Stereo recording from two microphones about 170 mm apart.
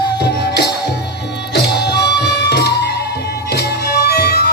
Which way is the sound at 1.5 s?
75° left (ahead or behind).